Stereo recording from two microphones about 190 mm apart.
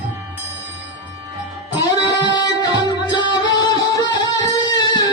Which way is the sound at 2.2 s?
20° left (ahead or behind).